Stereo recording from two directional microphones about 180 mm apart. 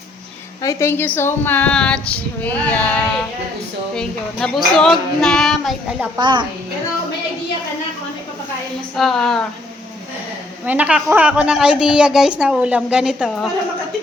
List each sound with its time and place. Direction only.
0.6 s a woman's voice: 15° left (ahead or behind)
6.1 s a woman's voice: 25° right (ahead or behind)
9.0 s a woman's voice: centre (ahead or behind)
10.7 s a woman's voice: 5° right (ahead or behind)